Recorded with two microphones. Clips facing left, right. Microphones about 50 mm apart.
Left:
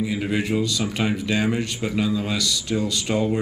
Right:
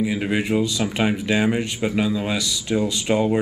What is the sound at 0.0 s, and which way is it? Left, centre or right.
Speech, centre.